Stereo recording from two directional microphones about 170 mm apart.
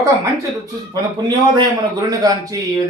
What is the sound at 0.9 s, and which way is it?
A man's voice, 25° right (ahead or behind).